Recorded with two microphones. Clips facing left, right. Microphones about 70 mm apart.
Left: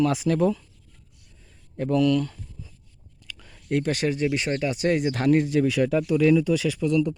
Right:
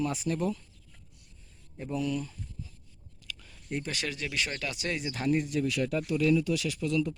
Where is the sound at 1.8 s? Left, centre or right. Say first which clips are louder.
Left 11 dB; left.